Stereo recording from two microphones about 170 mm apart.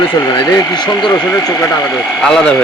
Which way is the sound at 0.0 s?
25° left (ahead or behind).